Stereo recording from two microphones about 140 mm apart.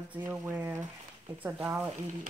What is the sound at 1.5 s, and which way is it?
Speech, 5° right (ahead or behind).